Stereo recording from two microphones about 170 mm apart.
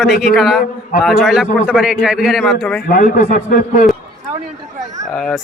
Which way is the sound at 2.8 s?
50° left (ahead or behind).